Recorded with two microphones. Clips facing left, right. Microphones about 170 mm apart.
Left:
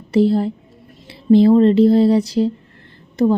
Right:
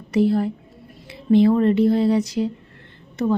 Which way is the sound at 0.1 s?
30° left (ahead or behind).